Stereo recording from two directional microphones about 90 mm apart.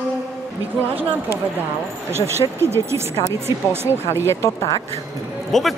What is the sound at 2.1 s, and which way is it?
Speech, 30° right (ahead or behind).